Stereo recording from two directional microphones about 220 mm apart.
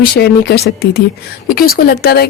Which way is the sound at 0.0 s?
45° left (ahead or behind).